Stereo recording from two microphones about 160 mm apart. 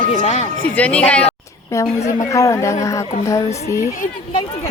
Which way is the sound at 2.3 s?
20° left (ahead or behind).